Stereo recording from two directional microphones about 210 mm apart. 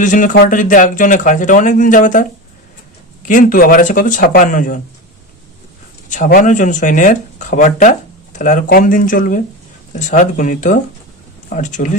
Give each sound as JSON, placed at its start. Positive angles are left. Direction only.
{"t": 0.0, "sound": "speech", "side_deg": 40}
{"t": 3.2, "sound": "speech", "side_deg": 40}
{"t": 6.1, "sound": "speech", "side_deg": 40}